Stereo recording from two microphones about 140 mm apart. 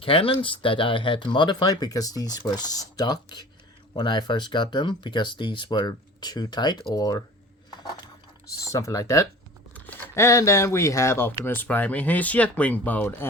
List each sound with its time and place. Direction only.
0.0 s speech: 40° left (ahead or behind)
8.6 s speech: 25° left (ahead or behind)